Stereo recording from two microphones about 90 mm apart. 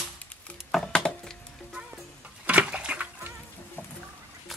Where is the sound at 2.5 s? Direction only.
15° right (ahead or behind).